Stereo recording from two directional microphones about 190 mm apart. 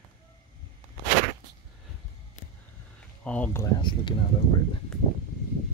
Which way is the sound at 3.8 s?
25° left (ahead or behind).